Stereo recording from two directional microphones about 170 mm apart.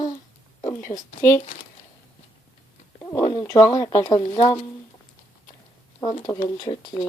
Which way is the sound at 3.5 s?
20° left (ahead or behind).